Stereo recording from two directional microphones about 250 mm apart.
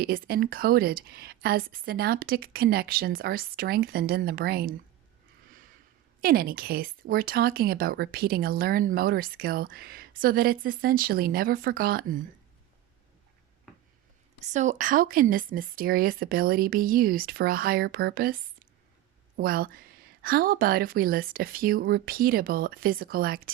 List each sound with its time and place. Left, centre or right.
0.0 s speech: right
6.2 s speech: right
14.4 s speech: right
19.4 s speech: right